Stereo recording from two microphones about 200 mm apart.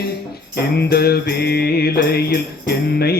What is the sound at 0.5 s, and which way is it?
Mantra, 50° left (ahead or behind).